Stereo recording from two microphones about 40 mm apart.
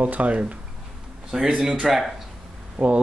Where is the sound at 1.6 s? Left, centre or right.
Centre.